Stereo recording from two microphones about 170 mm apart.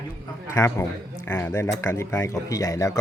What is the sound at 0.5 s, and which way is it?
Speech, 15° left (ahead or behind).